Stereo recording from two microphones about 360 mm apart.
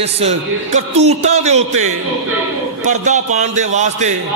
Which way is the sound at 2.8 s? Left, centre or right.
Centre.